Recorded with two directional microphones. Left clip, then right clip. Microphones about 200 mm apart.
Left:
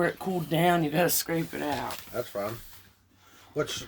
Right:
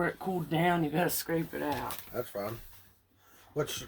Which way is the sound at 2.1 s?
Centre (ahead or behind).